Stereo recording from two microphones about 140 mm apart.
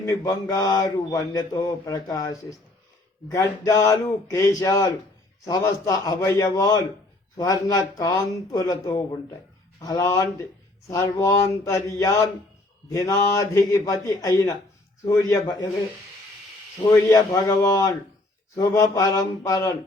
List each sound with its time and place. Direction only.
0.0 s speech: 20° left (ahead or behind)
16.9 s speech: 25° left (ahead or behind)